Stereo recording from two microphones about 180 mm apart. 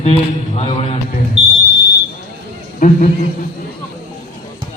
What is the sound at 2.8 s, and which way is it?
Speech, 45° left (ahead or behind).